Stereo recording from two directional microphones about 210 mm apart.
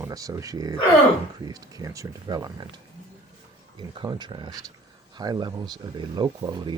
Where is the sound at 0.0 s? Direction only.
15° right (ahead or behind).